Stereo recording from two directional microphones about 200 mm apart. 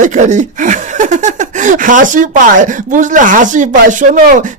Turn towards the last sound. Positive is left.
turn(degrees=-40)  # may be behind; listen again after turning